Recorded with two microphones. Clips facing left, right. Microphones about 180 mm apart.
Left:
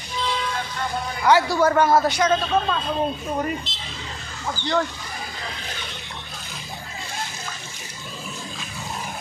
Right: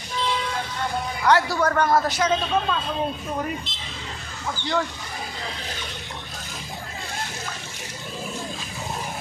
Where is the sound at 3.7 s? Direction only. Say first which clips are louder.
Left 1 dB; 55° right (ahead or behind).